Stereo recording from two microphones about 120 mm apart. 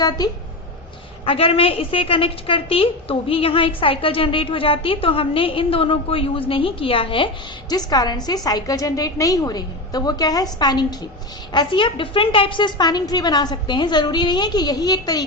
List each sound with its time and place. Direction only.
0.0 s a woman's voice: 35° left (ahead or behind)
1.2 s a woman's voice: 50° left (ahead or behind)
7.7 s a woman's voice: 35° left (ahead or behind)